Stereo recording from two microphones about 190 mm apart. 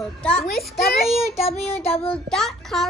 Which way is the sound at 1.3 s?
35° left (ahead or behind).